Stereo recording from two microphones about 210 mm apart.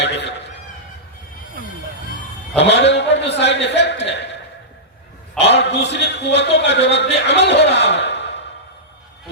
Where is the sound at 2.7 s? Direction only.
55° left (ahead or behind).